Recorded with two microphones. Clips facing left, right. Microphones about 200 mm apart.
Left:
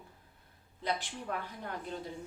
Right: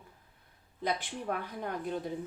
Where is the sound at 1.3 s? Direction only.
60° right (ahead or behind).